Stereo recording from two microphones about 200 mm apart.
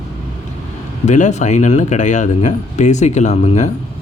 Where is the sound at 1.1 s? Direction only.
35° left (ahead or behind).